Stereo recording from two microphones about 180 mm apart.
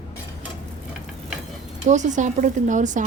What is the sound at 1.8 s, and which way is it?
Speech, 40° right (ahead or behind).